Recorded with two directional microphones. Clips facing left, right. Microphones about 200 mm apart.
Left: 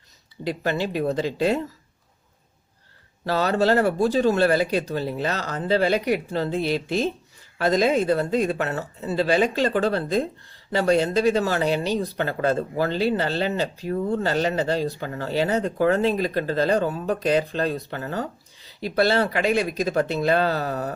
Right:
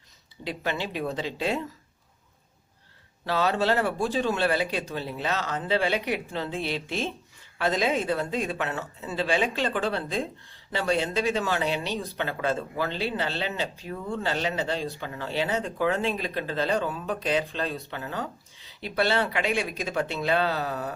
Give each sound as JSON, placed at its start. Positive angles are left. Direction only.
{"t": 0.4, "sound": "speech", "side_deg": 40}
{"t": 3.2, "sound": "speech", "side_deg": 40}